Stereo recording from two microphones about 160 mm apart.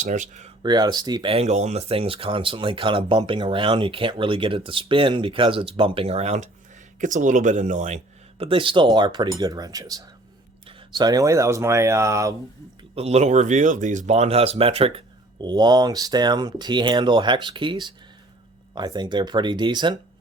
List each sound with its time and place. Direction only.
0.0 s speech: 50° right (ahead or behind)
0.6 s speech: 25° right (ahead or behind)
1.3 s speech: 40° right (ahead or behind); by 12.3 s 20° right (ahead or behind)
13.0 s speech: 40° right (ahead or behind)